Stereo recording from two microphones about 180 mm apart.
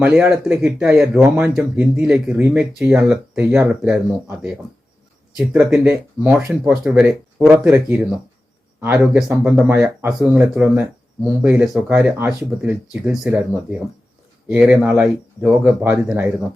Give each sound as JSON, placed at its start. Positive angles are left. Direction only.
{"t": 0.0, "sound": "speech", "side_deg": -5}
{"t": 5.5, "sound": "speech", "side_deg": -5}
{"t": 9.3, "sound": "speech", "side_deg": -5}